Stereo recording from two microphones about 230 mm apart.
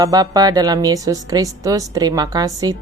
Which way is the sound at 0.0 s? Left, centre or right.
Centre.